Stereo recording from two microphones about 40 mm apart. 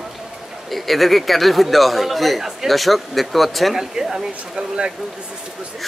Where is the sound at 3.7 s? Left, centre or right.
Centre.